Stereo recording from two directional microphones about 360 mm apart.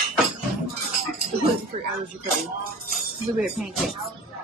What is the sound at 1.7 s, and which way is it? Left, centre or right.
Speech, centre.